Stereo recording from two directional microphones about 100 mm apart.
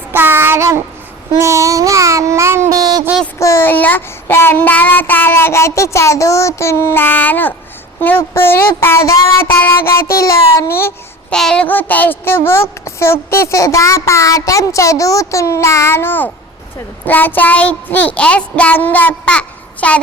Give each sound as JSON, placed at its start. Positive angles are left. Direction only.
{"t": 0.1, "sound": "child singing", "side_deg": -20}
{"t": 1.4, "sound": "a sound", "side_deg": -30}
{"t": 2.6, "sound": "a sound", "side_deg": -40}
{"t": 3.3, "sound": "a woman's voice", "side_deg": 25}
{"t": 11.3, "sound": "a woman's voice", "side_deg": 5}
{"t": 17.1, "sound": "child singing", "side_deg": 20}